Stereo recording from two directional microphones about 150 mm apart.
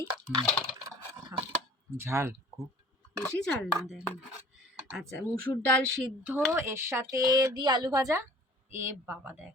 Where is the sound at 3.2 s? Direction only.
10° left (ahead or behind).